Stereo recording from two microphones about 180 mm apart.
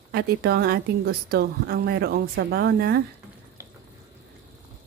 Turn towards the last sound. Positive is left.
turn(degrees=-60)  # may be behind; listen again after turning